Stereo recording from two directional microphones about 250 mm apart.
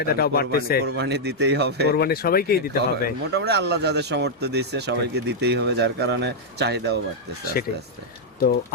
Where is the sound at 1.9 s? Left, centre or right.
Left.